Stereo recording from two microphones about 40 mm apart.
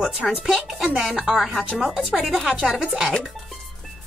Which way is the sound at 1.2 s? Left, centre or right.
Centre.